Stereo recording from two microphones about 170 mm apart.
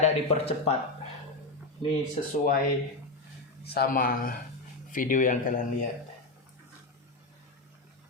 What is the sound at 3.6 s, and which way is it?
Speech, 65° left (ahead or behind).